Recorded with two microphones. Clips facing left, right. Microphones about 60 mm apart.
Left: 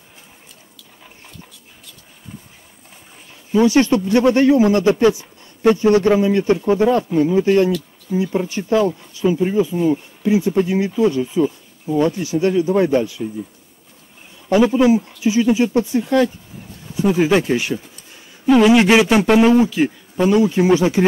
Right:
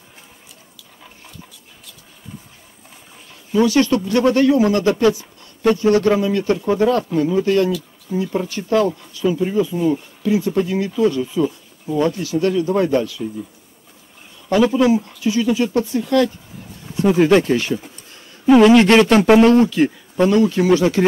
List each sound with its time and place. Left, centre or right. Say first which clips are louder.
3.5 s speech: left 1 dB; left
11.4 s a sound: left 1 dB; centre
12.0 s speech: left 1 dB; left
14.5 s speech: left 1 dB; centre
17.0 s a man's voice: right 2 dB; centre
20.2 s speech: left 1 dB; centre